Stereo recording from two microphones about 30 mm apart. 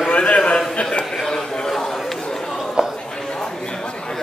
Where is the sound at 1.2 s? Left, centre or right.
Centre.